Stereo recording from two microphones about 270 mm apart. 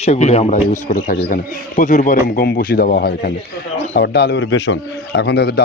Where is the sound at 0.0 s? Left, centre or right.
Left.